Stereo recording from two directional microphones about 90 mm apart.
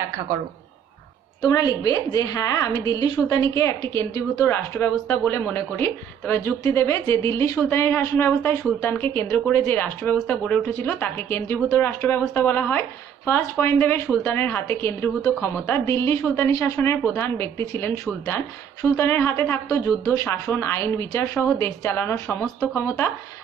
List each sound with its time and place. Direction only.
1.4 s a woman's voice: 45° left (ahead or behind)
3.9 s speech: 30° left (ahead or behind)
18.2 s speech: 40° left (ahead or behind)
22.8 s speech: 25° left (ahead or behind)